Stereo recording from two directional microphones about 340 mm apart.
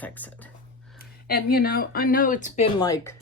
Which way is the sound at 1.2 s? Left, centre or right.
Left.